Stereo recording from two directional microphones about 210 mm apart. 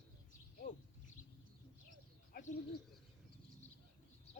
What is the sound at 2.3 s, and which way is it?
Bird, 45° left (ahead or behind).